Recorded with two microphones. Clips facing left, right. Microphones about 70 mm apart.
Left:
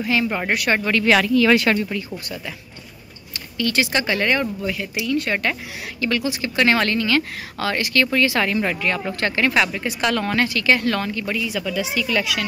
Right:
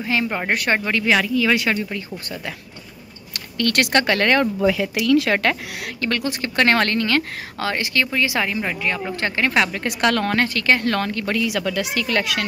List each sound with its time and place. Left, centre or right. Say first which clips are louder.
0.0 s speech: left 1 dB; right; by 1.9 s centre
3.5 s speech: right 2 dB; right
5.9 s speech: left 1 dB; right; by 9.0 s centre
9.2 s speech: even; right
9.7 s a woman's voice: right 2 dB; right